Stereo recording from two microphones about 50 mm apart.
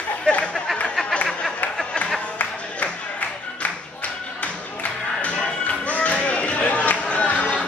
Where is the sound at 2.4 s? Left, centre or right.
Left.